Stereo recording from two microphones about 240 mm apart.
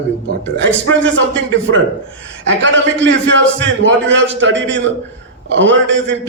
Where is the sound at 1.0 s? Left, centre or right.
Right.